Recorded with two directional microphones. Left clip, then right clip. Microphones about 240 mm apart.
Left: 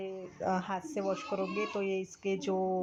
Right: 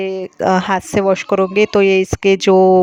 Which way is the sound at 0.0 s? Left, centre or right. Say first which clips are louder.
Right 19 dB; right.